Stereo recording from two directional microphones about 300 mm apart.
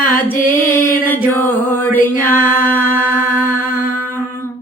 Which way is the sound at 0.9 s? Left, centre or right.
Centre.